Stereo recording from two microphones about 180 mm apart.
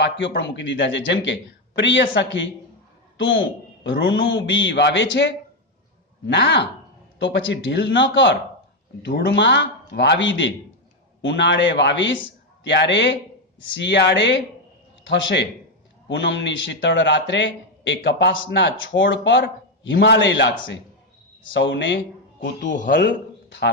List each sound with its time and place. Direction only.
0.0 s a man's voice: 80° left
7.2 s a man's voice: 90° left
9.0 s a man's voice: 70° left (ahead or behind)
15.0 s a man's voice: 85° left